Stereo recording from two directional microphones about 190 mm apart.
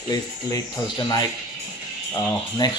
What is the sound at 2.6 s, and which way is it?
Speech, 20° left (ahead or behind).